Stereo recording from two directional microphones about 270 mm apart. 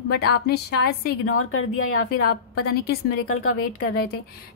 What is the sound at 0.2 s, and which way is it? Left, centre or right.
A woman's voice, left.